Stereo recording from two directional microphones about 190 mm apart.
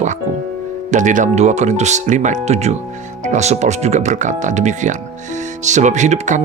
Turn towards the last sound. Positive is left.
turn(degrees=-40)  # may be behind; listen again after turning